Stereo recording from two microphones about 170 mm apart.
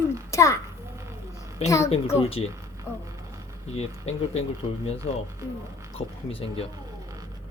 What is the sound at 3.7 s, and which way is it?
Speech, 40° left (ahead or behind).